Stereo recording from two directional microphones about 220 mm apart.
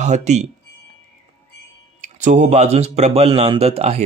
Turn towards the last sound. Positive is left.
turn(degrees=-30)  # may be behind; listen again after turning